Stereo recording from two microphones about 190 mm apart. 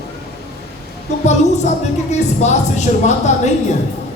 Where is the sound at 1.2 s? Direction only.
35° left (ahead or behind).